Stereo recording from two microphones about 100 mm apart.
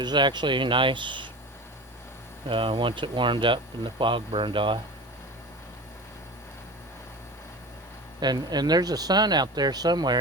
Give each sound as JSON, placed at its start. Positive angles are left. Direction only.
{"t": 0.0, "sound": "speech", "side_deg": -50}
{"t": 2.5, "sound": "speech", "side_deg": -60}
{"t": 8.2, "sound": "speech", "side_deg": -45}